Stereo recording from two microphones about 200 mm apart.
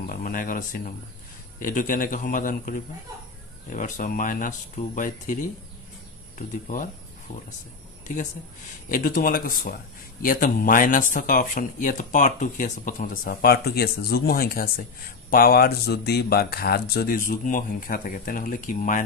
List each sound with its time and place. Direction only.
0.0 s speech: 45° left (ahead or behind)
3.7 s speech: 40° left (ahead or behind)
8.8 s speech: 40° left (ahead or behind)